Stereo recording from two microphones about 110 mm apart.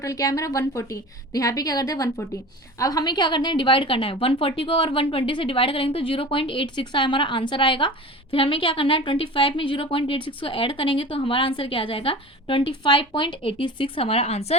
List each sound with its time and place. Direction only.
0.0 s a woman's voice: 30° left (ahead or behind); by 14.5 s 70° left (ahead or behind)